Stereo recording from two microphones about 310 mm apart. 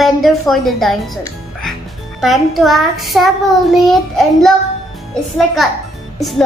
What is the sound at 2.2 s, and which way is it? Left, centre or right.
Child singing, centre.